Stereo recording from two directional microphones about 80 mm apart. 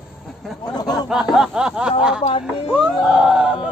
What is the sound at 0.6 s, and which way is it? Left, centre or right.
Speech, left.